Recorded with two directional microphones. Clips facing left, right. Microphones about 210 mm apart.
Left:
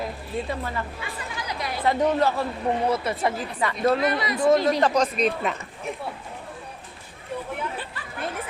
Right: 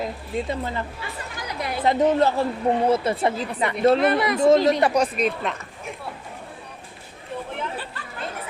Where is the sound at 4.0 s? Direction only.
55° right (ahead or behind).